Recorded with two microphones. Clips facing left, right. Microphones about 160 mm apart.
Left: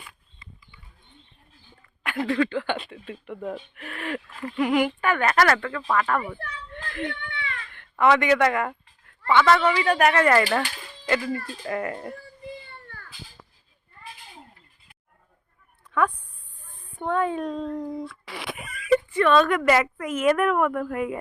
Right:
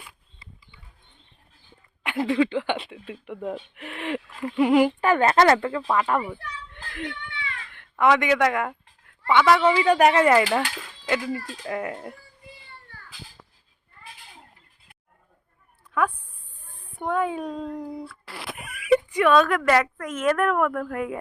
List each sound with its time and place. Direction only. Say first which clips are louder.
2.0 s speech: right 2 dB; 20° right (ahead or behind)
4.6 s speech: right 4 dB; 30° right (ahead or behind)
7.7 s speech: even; 5° right (ahead or behind)
9.2 s a woman's voice: right 1 dB; 15° right (ahead or behind)
15.9 s speech: left 1 dB; 5° right (ahead or behind)
16.8 s a sound: even; 10° right (ahead or behind)
19.3 s a woman's voice: even; centre (ahead or behind)